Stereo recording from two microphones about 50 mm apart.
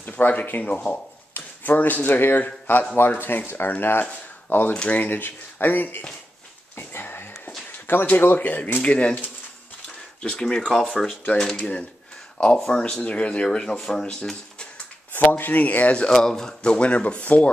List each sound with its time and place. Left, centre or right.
0.0 s speech: left
4.7 s speech: left
5.1 s speech: left
6.9 s a sound: left
8.1 s speech: left
10.2 s speech: centre
10.7 s speech: centre
11.5 s speech: left
13.0 s speech: left
15.3 s speech: left
16.1 s speech: centre; by 17.5 s left